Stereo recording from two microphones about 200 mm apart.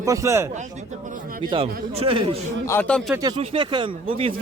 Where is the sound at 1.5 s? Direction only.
25° right (ahead or behind).